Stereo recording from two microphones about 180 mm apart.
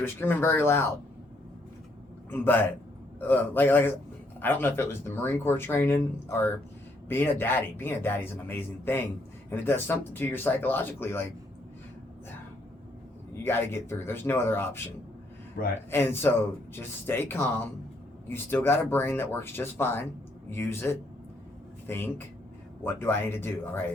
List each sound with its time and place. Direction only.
0.0 s speech: 10° left (ahead or behind)
2.3 s speech: 10° left (ahead or behind)
13.4 s speech: 15° left (ahead or behind)
15.6 s speech: 55° left (ahead or behind)
15.9 s speech: 15° left (ahead or behind)